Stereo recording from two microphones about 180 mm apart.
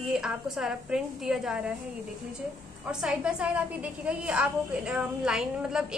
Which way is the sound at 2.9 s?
5° right (ahead or behind).